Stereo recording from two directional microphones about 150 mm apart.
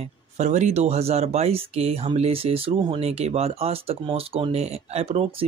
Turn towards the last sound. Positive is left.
turn(degrees=-45)  # may be behind; listen again after turning